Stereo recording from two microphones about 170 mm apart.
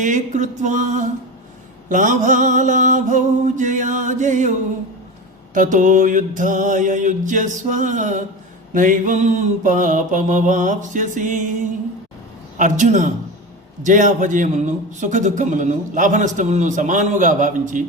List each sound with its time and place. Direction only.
0.0 s a man's voice: 45° right (ahead or behind)
5.5 s a man's voice: 50° right (ahead or behind)